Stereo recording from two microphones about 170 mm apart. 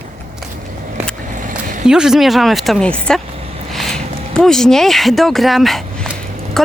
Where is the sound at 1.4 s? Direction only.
50° right (ahead or behind).